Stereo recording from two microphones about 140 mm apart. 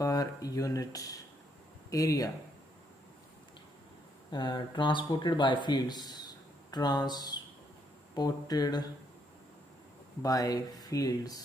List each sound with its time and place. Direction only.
0.0 s speech: 25° left (ahead or behind)
4.3 s speech: 35° left (ahead or behind)
10.2 s speech: 25° left (ahead or behind)